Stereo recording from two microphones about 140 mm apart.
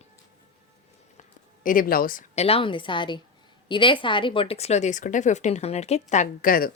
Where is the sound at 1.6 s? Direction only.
85° left.